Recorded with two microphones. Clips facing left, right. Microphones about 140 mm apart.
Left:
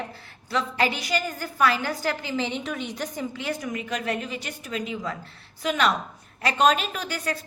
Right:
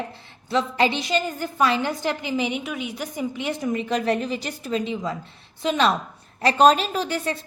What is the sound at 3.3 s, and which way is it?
A woman's voice, 20° right (ahead or behind).